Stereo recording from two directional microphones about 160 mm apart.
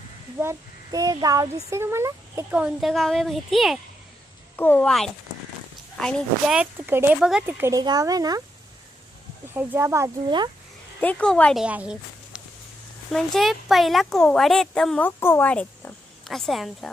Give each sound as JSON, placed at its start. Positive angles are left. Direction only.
{"t": 0.3, "sound": "speech", "side_deg": -20}
{"t": 2.5, "sound": "speech", "side_deg": -5}
{"t": 4.5, "sound": "speech", "side_deg": 10}
{"t": 6.6, "sound": "speech", "side_deg": -15}
{"t": 9.6, "sound": "speech", "side_deg": -15}
{"t": 10.2, "sound": "speech", "side_deg": -30}
{"t": 11.0, "sound": "speech", "side_deg": 10}
{"t": 11.6, "sound": "speech", "side_deg": -5}